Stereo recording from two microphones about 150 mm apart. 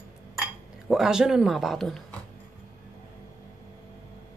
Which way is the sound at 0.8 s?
5° right (ahead or behind).